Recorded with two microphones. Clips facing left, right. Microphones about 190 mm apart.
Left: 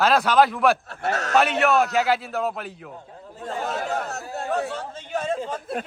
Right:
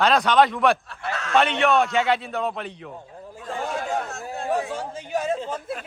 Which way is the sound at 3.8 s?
40° left (ahead or behind).